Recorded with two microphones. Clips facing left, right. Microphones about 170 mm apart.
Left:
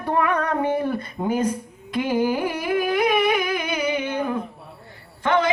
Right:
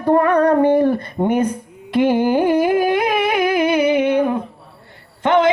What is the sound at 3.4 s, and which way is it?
Humming, 55° right (ahead or behind).